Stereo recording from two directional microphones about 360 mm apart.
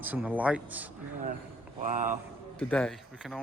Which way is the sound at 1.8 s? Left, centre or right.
Right.